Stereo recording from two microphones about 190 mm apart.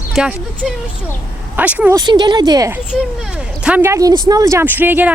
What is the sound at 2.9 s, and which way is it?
Speech, 5° right (ahead or behind).